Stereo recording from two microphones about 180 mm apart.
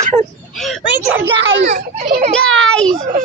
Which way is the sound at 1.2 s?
80° right.